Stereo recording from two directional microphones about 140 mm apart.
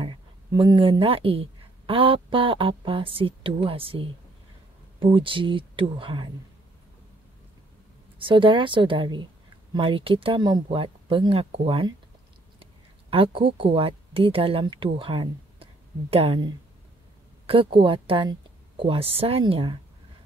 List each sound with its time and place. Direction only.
0.0 s a woman's voice: 35° right (ahead or behind)
8.2 s a woman's voice: 35° right (ahead or behind)
13.1 s a woman's voice: 40° right (ahead or behind)